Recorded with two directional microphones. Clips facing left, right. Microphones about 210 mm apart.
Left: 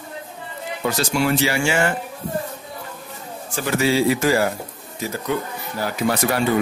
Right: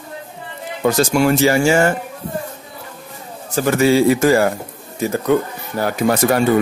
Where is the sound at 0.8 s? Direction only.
50° right (ahead or behind).